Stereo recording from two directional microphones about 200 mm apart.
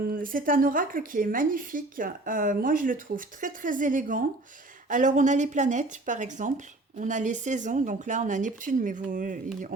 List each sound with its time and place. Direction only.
0.1 s speech: 45° right (ahead or behind)